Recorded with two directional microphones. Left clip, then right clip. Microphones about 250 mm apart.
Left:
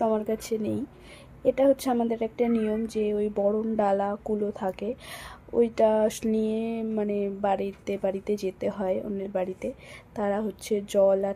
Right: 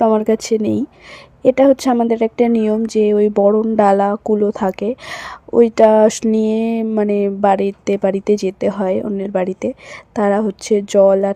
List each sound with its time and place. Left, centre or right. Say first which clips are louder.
0.0 s a woman's voice: right 12 dB; right